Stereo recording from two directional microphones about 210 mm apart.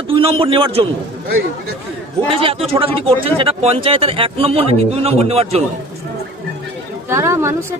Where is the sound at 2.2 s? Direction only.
25° right (ahead or behind).